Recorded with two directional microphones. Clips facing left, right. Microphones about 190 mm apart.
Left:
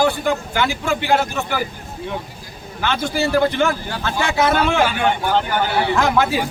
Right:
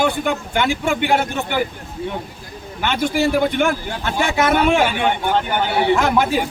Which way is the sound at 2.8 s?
15° right (ahead or behind).